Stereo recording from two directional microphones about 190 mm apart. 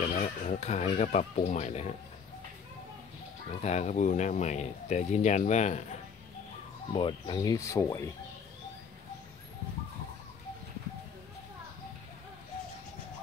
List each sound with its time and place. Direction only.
0.0 s speech: 35° left (ahead or behind)
3.6 s speech: 35° left (ahead or behind)
6.9 s speech: 25° left (ahead or behind)